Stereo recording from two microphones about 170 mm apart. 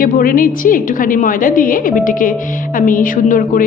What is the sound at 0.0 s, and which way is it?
A woman's voice, 55° left (ahead or behind).